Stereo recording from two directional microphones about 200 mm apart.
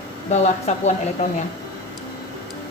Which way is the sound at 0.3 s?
35° left (ahead or behind).